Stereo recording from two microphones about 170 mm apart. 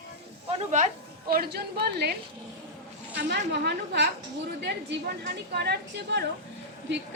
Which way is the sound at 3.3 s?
85° right.